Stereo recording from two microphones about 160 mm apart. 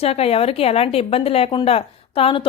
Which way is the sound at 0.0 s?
40° left (ahead or behind).